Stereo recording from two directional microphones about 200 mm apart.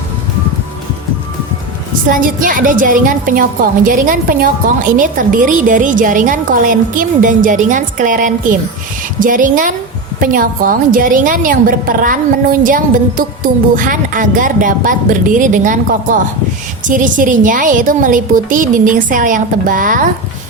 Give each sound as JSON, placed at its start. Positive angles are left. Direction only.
{"t": 2.0, "sound": "a woman's voice", "side_deg": -45}